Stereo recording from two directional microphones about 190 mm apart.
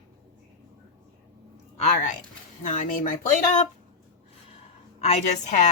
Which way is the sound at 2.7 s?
40° left (ahead or behind).